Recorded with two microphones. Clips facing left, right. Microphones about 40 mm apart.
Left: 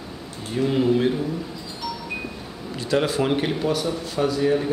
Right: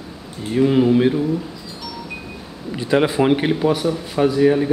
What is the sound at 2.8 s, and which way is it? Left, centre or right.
Speech, right.